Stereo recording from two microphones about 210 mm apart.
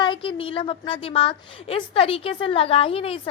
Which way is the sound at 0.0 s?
25° left (ahead or behind).